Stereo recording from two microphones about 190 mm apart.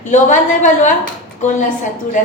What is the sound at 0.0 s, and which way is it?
A woman's voice, 40° left (ahead or behind).